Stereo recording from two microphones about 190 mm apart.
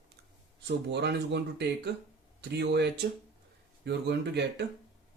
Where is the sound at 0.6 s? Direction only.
60° right (ahead or behind).